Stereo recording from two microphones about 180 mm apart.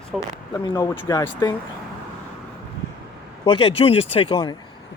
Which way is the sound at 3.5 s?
30° left (ahead or behind).